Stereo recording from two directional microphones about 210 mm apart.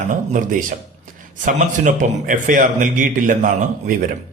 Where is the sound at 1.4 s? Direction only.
35° right (ahead or behind).